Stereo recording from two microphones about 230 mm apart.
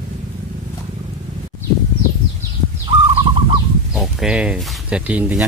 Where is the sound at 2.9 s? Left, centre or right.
Right.